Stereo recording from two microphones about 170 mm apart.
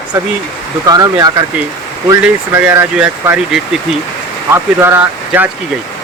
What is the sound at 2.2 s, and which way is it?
Speech, 10° right (ahead or behind).